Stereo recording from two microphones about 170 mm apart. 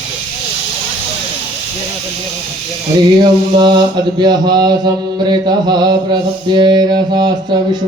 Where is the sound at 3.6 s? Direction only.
25° right (ahead or behind).